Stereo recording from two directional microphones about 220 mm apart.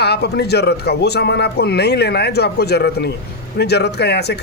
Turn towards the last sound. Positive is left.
turn(degrees=50)  # may be behind; listen again after turning